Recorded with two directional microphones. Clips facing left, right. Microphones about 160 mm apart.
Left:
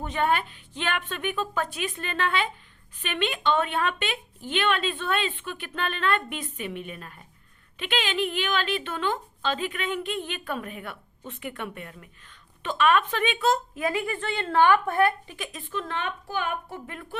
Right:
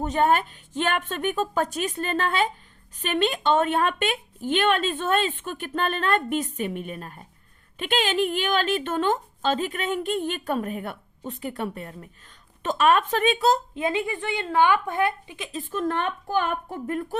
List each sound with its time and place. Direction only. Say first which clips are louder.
0.0 s a woman's voice: right 4 dB; 40° right (ahead or behind); by 15.4 s 20° right (ahead or behind)
15.7 s a woman's voice: right 6 dB; 45° right (ahead or behind)